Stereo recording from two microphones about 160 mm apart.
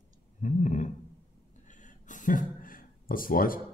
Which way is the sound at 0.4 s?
50° left (ahead or behind).